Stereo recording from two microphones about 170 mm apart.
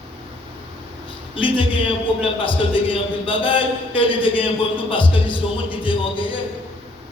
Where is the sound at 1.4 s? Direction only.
30° left (ahead or behind).